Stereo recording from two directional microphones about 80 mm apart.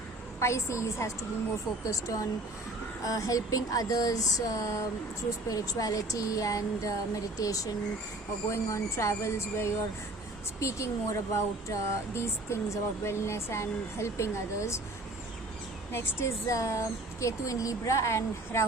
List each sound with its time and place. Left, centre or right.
0.3 s speech: left
15.9 s speech: left